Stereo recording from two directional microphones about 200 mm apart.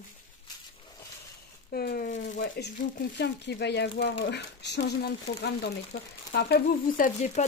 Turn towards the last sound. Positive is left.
turn(degrees=40)  # may be behind; listen again after turning